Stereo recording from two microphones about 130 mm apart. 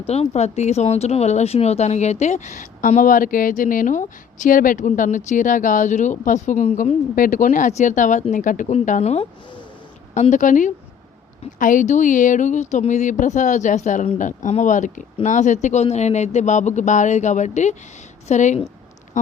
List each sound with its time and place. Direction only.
0.1 s speech: 55° left (ahead or behind)
10.2 s a woman's voice: 70° left (ahead or behind)